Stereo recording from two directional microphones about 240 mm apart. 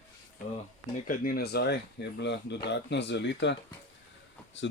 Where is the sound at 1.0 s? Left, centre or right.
Left.